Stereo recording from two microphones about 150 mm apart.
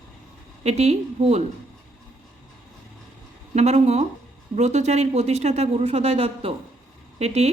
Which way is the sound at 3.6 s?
45° right (ahead or behind).